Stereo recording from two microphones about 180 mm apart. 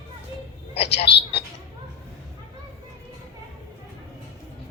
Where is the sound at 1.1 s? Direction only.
70° left (ahead or behind).